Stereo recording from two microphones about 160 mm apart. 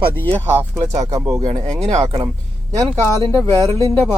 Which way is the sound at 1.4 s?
40° right (ahead or behind).